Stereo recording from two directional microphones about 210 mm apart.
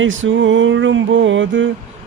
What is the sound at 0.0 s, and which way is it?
Mantra, 65° right (ahead or behind).